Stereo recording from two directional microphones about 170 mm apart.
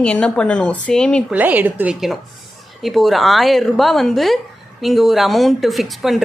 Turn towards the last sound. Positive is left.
turn(degrees=0)  # may be behind; listen again after turning